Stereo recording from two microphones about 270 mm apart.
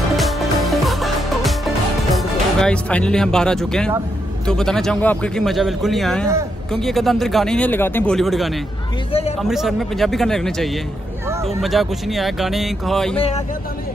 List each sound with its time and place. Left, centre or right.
0.1 s music: centre
2.1 s speech: centre